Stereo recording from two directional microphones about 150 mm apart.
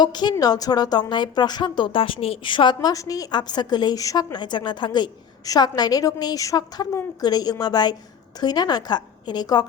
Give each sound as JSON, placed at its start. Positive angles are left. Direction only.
{"t": 0.0, "sound": "a woman's voice", "side_deg": 30}